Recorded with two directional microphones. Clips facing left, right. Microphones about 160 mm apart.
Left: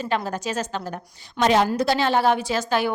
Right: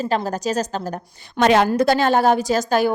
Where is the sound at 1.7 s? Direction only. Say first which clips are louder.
Right 4 dB; 50° right (ahead or behind).